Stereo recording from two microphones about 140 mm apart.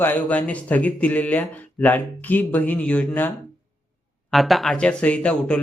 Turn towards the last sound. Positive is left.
turn(degrees=10)  # may be behind; listen again after turning